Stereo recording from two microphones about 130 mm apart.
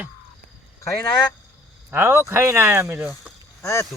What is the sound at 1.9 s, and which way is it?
Speech, 15° right (ahead or behind).